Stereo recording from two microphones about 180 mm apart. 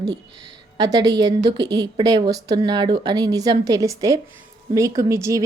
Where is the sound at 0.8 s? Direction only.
20° right (ahead or behind).